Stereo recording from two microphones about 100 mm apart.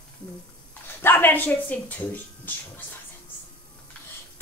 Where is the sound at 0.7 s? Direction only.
20° left (ahead or behind).